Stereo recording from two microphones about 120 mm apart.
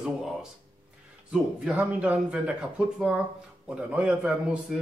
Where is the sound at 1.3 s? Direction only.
10° right (ahead or behind).